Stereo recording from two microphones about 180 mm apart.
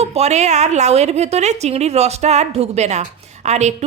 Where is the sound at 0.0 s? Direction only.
35° right (ahead or behind).